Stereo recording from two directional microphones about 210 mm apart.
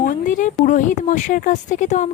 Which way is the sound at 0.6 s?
35° left (ahead or behind).